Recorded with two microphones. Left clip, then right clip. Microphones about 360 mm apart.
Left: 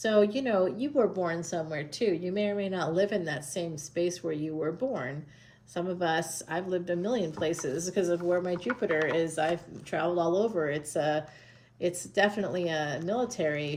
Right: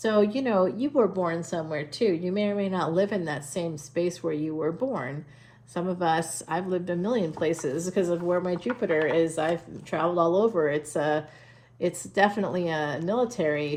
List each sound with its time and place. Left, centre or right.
0.0 s speech: centre